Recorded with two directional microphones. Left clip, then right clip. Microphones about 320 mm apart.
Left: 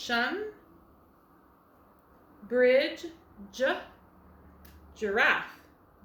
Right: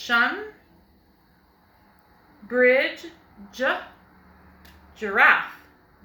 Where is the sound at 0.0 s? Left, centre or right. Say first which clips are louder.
Right 8 dB; centre.